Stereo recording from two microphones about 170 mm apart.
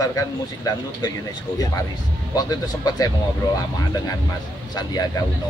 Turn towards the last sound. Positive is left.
turn(degrees=20)  # may be behind; listen again after turning